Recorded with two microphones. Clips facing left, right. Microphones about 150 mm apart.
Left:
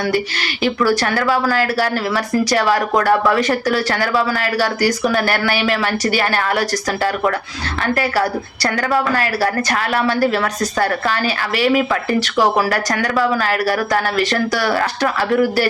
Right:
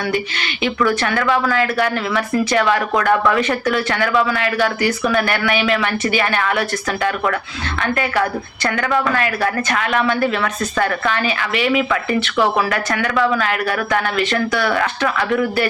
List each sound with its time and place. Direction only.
1.5 s speech: 35° left (ahead or behind)
5.5 s speech: centre (ahead or behind)
5.8 s speech: 35° left (ahead or behind)